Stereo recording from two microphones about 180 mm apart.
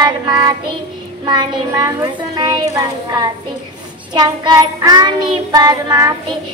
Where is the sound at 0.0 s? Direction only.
25° right (ahead or behind).